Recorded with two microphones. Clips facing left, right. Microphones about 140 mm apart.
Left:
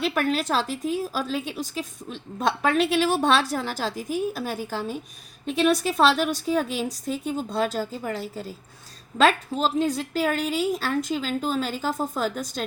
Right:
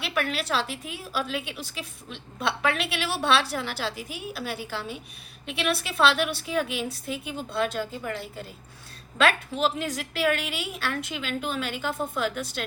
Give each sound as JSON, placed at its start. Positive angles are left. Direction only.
{"t": 0.0, "sound": "a woman's voice", "side_deg": 40}